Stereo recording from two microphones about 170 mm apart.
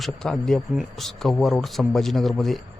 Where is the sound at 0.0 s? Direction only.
Centre (ahead or behind).